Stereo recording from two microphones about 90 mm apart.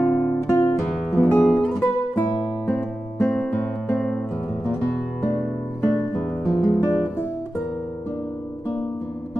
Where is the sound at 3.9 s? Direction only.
Centre (ahead or behind).